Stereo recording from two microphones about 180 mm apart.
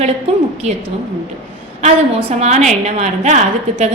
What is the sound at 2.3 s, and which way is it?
A woman's voice, 40° right (ahead or behind).